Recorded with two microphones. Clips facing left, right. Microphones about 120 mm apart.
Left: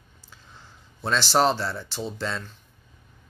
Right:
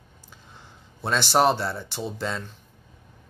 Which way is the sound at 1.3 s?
20° right (ahead or behind).